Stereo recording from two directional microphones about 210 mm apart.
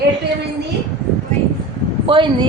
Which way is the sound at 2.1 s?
25° right (ahead or behind).